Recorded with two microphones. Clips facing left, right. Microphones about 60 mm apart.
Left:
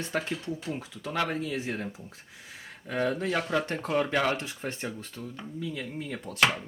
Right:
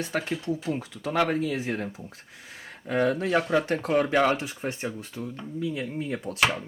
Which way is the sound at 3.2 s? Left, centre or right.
Centre.